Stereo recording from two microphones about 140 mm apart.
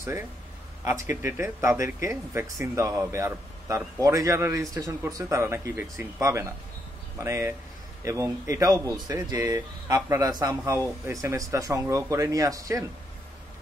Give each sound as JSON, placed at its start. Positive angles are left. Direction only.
{"t": 0.8, "sound": "speech", "side_deg": -20}